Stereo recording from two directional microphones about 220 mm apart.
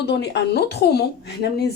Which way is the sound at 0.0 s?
50° left (ahead or behind).